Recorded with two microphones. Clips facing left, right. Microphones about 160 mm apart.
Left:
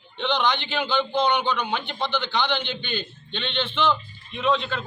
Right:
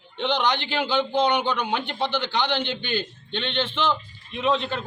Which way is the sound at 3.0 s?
45° right (ahead or behind).